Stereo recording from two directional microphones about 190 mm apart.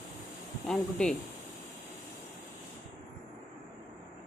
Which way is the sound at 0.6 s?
5° left (ahead or behind).